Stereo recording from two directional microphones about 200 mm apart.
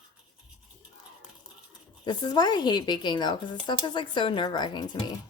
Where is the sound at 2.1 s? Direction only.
20° left (ahead or behind).